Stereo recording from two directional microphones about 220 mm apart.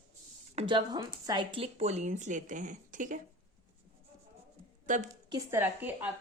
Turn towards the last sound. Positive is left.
turn(degrees=-10)  # may be behind; listen again after turning